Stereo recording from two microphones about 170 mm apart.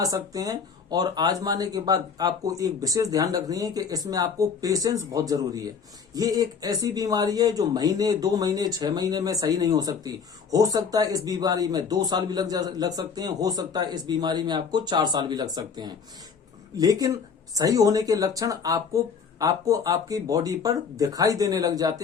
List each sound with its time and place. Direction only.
0.0 s speech: 20° right (ahead or behind)